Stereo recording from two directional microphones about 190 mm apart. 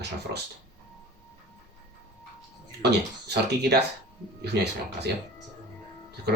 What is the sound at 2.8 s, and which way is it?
Speech, 60° right (ahead or behind).